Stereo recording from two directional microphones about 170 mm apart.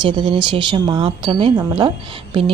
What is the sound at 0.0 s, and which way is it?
Speech, 30° right (ahead or behind).